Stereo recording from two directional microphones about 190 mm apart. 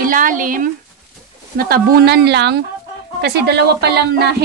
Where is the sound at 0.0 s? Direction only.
45° right (ahead or behind).